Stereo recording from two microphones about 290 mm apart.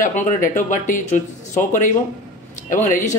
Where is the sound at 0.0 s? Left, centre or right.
Left.